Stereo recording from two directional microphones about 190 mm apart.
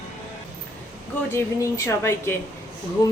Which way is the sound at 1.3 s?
15° left (ahead or behind).